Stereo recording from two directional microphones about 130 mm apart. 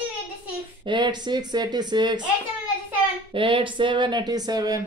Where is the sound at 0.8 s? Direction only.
35° right (ahead or behind).